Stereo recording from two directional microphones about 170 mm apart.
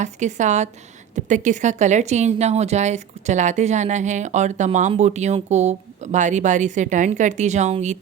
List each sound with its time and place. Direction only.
0.0 s a woman's voice: 45° right (ahead or behind)